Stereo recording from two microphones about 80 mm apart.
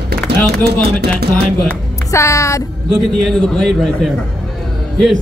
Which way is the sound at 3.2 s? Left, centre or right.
Centre.